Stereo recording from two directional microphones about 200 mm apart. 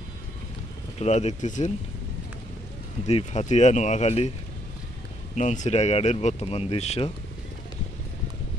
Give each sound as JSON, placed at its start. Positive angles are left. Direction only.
{"t": 0.9, "sound": "speech", "side_deg": 35}
{"t": 3.1, "sound": "speech", "side_deg": 35}
{"t": 5.3, "sound": "speech", "side_deg": 35}